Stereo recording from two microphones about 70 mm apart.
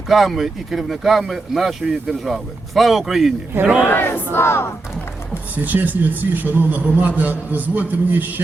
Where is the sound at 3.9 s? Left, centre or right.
Left.